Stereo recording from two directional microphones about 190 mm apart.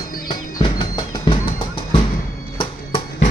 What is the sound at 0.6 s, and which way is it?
Music, 25° left (ahead or behind).